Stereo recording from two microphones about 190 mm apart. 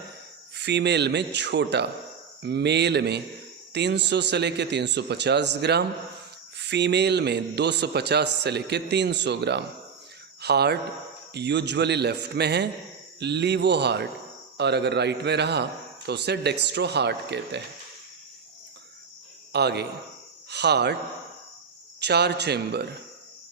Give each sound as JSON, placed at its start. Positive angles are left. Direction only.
{"t": 0.5, "sound": "speech", "side_deg": -65}
{"t": 19.5, "sound": "speech", "side_deg": -60}
{"t": 22.0, "sound": "speech", "side_deg": -60}